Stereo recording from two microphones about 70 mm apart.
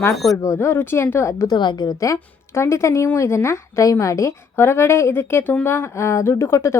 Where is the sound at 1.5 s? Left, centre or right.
Left.